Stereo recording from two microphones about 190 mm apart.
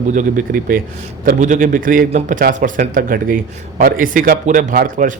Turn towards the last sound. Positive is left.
turn(degrees=-45)  # may be behind; listen again after turning